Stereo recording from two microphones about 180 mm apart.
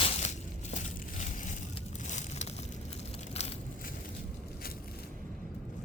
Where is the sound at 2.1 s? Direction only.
40° left (ahead or behind).